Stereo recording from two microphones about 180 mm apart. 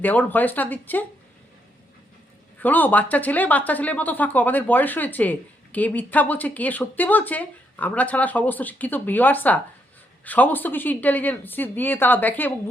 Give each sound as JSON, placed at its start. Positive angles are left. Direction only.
{"t": 0.0, "sound": "speech", "side_deg": 10}
{"t": 2.6, "sound": "speech", "side_deg": 10}